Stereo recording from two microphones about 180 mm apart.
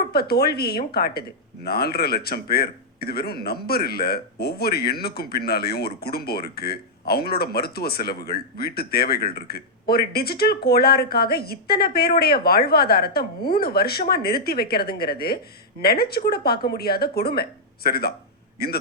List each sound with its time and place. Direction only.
0.1 s a man's voice: 60° left (ahead or behind)